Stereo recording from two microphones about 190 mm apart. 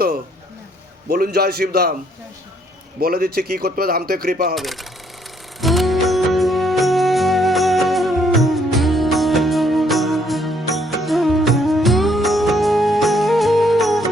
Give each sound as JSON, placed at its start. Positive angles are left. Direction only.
{"t": 1.1, "sound": "a man's voice", "side_deg": -55}
{"t": 3.0, "sound": "speech", "side_deg": -55}
{"t": 4.5, "sound": "speech", "side_deg": 0}
{"t": 5.5, "sound": "music", "side_deg": 0}